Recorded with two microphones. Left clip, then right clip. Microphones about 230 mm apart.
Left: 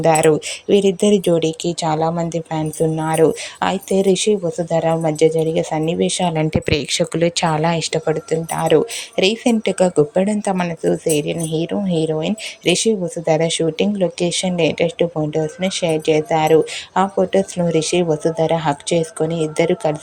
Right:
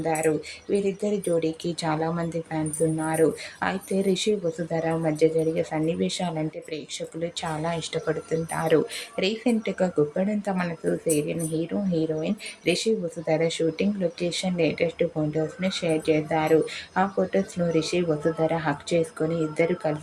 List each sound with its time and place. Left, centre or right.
0.0 s speech: left
6.3 s speech: left